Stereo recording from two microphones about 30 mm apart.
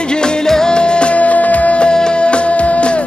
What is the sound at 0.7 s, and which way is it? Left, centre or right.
Music, left.